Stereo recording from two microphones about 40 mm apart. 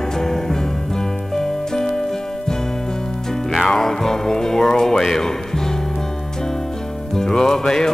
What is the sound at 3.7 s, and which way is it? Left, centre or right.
Music, centre.